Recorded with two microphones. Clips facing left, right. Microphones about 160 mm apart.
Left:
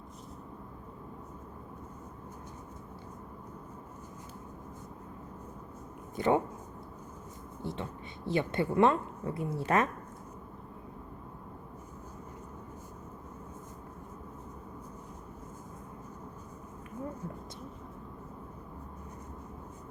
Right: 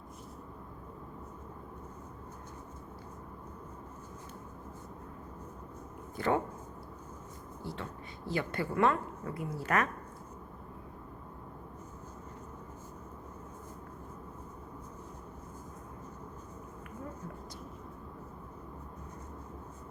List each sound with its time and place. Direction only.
6.1 s a woman's voice: 20° left (ahead or behind)
7.6 s a sound: 20° left (ahead or behind)
8.3 s a woman's voice: 25° left (ahead or behind)